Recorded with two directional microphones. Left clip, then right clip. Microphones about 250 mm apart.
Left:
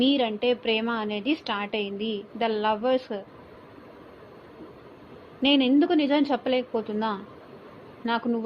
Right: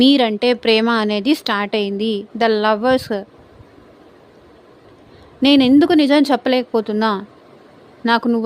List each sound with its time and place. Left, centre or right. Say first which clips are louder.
0.0 s a woman's voice: right 10 dB; right
5.4 s a woman's voice: right 9 dB; right